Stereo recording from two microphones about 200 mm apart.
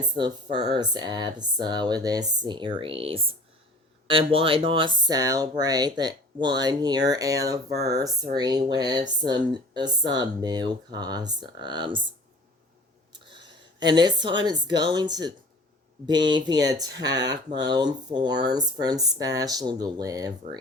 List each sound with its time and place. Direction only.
0.5 s speech: 25° right (ahead or behind)
13.1 s a woman's voice: 20° right (ahead or behind)
16.6 s speech: 20° right (ahead or behind)